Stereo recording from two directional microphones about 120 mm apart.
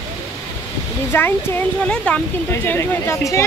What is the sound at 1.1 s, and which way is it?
Speech, 20° left (ahead or behind).